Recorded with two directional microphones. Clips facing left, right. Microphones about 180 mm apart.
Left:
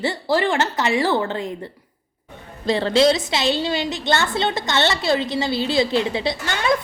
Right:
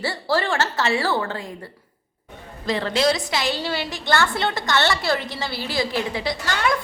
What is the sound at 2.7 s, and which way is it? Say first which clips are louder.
A woman's voice: left 4 dB; 30° left (ahead or behind).